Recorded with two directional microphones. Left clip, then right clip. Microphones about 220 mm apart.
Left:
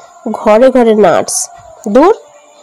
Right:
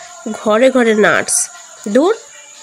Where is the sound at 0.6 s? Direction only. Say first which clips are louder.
Left 2 dB; 10° left (ahead or behind).